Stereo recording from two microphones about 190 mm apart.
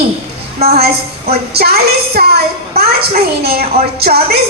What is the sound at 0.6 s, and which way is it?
A woman's voice, 55° right (ahead or behind).